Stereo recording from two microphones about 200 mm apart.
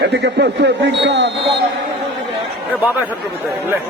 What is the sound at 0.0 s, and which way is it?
Speech, 55° right (ahead or behind).